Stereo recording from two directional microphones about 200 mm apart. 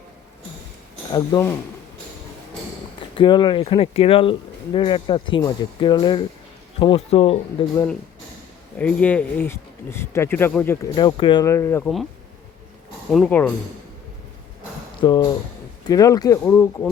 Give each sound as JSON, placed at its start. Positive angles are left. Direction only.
{"t": 1.1, "sound": "speech", "side_deg": 15}
{"t": 3.2, "sound": "speech", "side_deg": 25}
{"t": 8.8, "sound": "speech", "side_deg": 5}
{"t": 10.9, "sound": "speech", "side_deg": 25}
{"t": 13.1, "sound": "speech", "side_deg": 5}
{"t": 15.0, "sound": "speech", "side_deg": 20}